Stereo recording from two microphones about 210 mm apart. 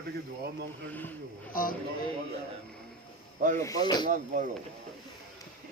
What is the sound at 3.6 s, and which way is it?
Speech, 15° left (ahead or behind).